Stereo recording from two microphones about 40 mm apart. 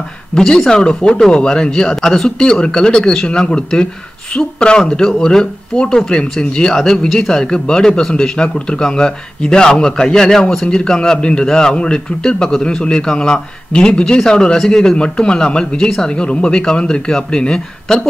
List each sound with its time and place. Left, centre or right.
0.3 s a man's voice: centre
17.9 s a man's voice: centre